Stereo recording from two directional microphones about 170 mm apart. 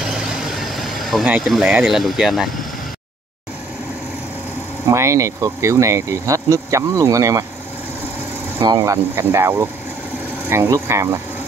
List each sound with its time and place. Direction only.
0.0 s vehicle: 5° right (ahead or behind)
4.8 s speech: 15° right (ahead or behind)
8.5 s speech: 25° right (ahead or behind)